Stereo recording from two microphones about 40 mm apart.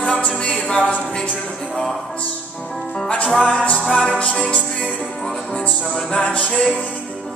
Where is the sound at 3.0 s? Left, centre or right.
Left.